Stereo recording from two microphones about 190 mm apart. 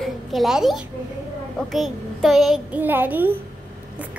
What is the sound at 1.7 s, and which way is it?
A child's voice, centre (ahead or behind).